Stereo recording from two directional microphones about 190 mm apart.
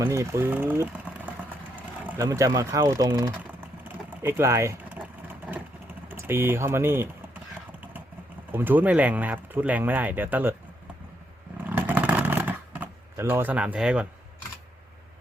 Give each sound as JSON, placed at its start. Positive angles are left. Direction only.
{"t": 0.0, "sound": "speech", "side_deg": -15}
{"t": 3.8, "sound": "vehicle", "side_deg": -10}
{"t": 6.1, "sound": "speech", "side_deg": -10}
{"t": 8.5, "sound": "speech", "side_deg": -10}
{"t": 11.5, "sound": "a sound", "side_deg": -10}